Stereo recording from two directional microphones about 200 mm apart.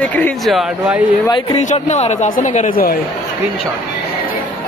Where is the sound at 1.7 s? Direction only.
35° left (ahead or behind).